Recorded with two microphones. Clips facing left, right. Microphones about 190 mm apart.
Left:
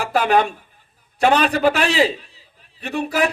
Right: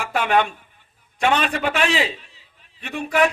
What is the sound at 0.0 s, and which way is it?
A man's voice, 35° left (ahead or behind).